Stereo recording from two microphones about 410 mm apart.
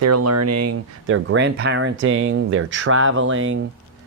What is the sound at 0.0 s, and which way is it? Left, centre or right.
Speech, right.